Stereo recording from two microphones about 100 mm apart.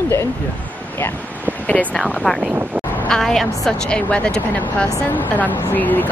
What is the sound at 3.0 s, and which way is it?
Speech, 5° left (ahead or behind).